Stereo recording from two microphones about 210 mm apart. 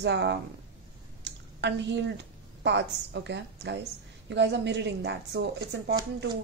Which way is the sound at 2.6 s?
55° right (ahead or behind).